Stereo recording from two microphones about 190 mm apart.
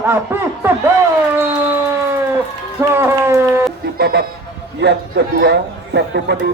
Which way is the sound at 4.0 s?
60° right (ahead or behind).